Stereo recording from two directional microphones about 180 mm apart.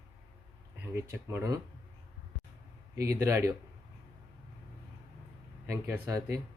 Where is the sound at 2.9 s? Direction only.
15° right (ahead or behind).